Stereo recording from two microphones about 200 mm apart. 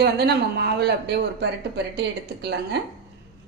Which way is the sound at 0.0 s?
50° right (ahead or behind).